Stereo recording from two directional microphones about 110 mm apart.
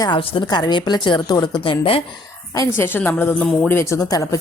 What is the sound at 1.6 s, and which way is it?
Speech, 55° left (ahead or behind).